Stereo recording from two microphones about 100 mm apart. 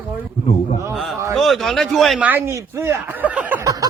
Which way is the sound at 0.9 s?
Centre (ahead or behind).